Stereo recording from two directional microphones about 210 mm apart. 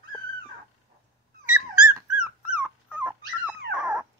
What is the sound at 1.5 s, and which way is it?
Dog, 5° right (ahead or behind).